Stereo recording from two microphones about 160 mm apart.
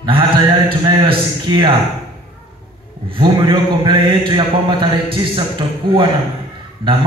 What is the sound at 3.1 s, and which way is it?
A man's voice, 30° right (ahead or behind).